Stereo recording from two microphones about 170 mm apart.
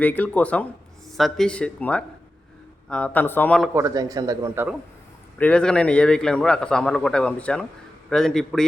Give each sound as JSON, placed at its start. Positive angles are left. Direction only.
{"t": 0.0, "sound": "speech", "side_deg": 10}
{"t": 3.8, "sound": "a man's voice", "side_deg": -20}
{"t": 5.4, "sound": "speech", "side_deg": 5}